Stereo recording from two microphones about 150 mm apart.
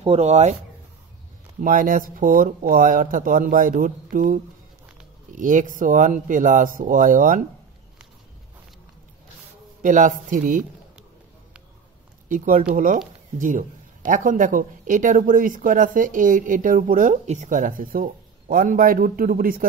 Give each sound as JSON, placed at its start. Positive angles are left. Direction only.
{"t": 0.0, "sound": "speech", "side_deg": -45}
{"t": 1.6, "sound": "speech", "side_deg": -65}
{"t": 9.8, "sound": "speech", "side_deg": -60}
{"t": 12.3, "sound": "speech", "side_deg": -60}